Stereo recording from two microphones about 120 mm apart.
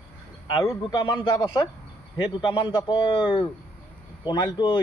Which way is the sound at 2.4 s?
35° left (ahead or behind).